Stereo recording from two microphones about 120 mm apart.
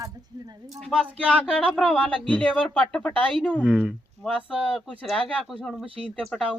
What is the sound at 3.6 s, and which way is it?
Speech, 10° right (ahead or behind).